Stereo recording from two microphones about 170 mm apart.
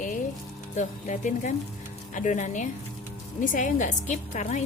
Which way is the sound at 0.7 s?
45° left (ahead or behind).